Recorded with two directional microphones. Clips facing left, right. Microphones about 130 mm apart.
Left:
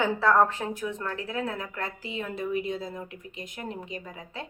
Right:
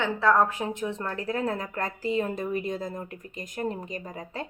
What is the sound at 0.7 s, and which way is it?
A woman's voice, 30° right (ahead or behind).